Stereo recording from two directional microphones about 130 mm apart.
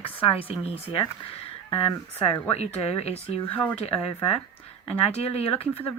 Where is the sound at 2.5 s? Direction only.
55° left (ahead or behind).